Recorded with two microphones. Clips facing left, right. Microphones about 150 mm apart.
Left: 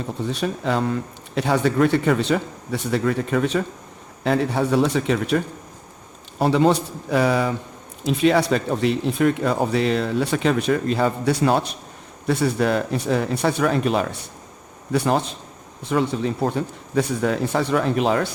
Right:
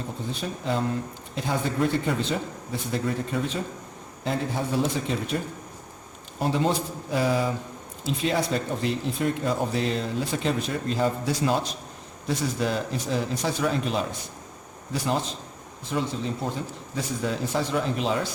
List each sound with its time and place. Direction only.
0.3 s speech: 70° left (ahead or behind)
6.4 s speech: 75° left (ahead or behind); by 18.3 s 60° left (ahead or behind)